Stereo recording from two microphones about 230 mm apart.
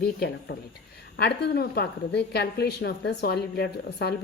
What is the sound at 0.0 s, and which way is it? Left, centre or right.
A woman's voice, left.